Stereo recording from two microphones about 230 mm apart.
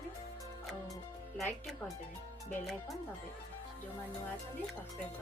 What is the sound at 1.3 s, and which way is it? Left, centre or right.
Speech, centre.